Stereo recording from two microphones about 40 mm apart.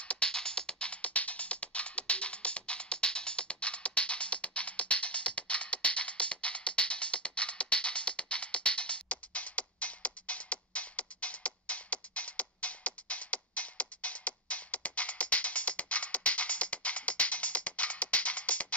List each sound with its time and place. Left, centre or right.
0.1 s music: left
1.0 s music: left